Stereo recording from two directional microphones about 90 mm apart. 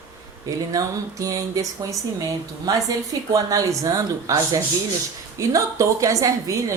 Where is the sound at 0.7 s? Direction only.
40° right (ahead or behind).